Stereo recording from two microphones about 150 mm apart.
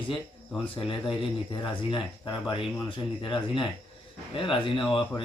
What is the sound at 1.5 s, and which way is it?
Speech, 35° left (ahead or behind).